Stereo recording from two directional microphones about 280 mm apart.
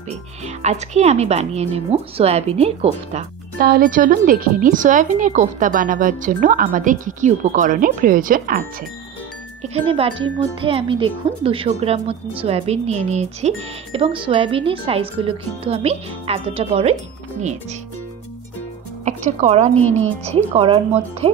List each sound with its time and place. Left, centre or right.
0.5 s a woman's voice: right
19.0 s a woman's voice: right